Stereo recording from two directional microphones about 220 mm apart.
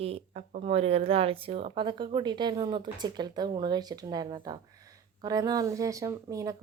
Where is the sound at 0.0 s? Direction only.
30° right (ahead or behind).